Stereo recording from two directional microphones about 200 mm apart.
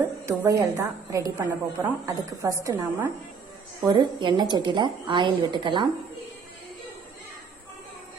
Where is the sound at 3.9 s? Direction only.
25° right (ahead or behind).